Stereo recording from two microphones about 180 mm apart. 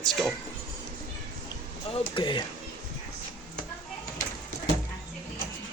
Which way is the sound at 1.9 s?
30° left (ahead or behind).